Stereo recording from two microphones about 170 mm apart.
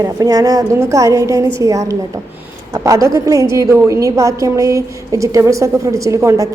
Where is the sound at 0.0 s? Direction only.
20° right (ahead or behind).